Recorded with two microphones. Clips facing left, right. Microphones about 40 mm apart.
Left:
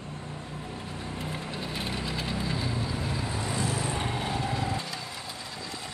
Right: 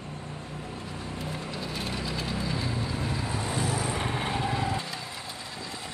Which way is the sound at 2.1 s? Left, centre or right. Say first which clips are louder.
Even; centre.